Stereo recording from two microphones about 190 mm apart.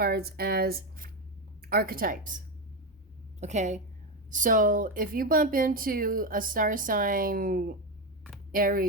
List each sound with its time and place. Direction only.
0.0 s speech: 55° right (ahead or behind)
3.4 s a woman's voice: 40° right (ahead or behind)